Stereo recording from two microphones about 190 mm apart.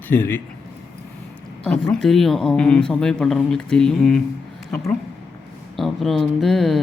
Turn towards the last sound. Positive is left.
turn(degrees=0)  # may be behind; listen again after turning